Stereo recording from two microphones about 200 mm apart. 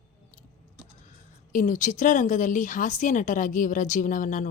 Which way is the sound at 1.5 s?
40° left (ahead or behind).